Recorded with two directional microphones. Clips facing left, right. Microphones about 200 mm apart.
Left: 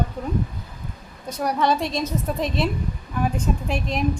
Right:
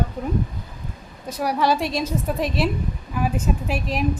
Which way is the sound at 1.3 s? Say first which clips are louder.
Right 1 dB; 5° right (ahead or behind).